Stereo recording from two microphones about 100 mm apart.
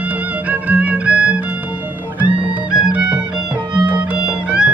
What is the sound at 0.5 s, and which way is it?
Music, 15° right (ahead or behind).